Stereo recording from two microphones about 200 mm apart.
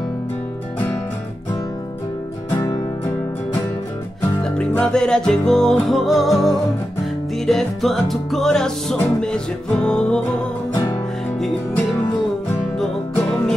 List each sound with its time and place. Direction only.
4.5 s music: 5° left (ahead or behind)
10.7 s music: 15° left (ahead or behind)
11.3 s music: centre (ahead or behind)